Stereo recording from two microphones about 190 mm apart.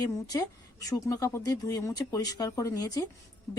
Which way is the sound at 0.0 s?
20° left (ahead or behind).